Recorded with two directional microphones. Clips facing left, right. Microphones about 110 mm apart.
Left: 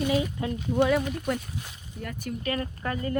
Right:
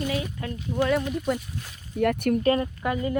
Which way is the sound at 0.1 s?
20° left (ahead or behind).